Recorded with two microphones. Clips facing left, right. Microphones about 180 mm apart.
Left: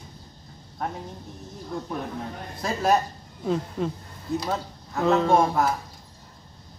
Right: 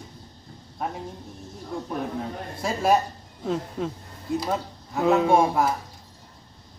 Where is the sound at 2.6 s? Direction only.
10° right (ahead or behind).